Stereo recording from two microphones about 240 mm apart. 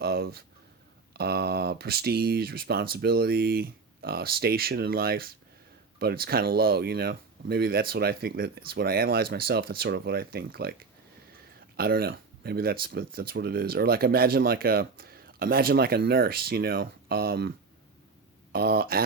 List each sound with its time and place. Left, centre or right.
0.0 s a sound: right
1.1 s speech: right
11.8 s speech: right
18.5 s speech: right